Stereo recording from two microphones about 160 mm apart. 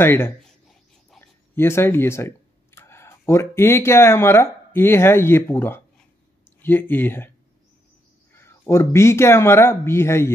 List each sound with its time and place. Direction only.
0.0 s speech: 15° left (ahead or behind)
0.5 s a sound: centre (ahead or behind)
1.2 s speech: 15° left (ahead or behind)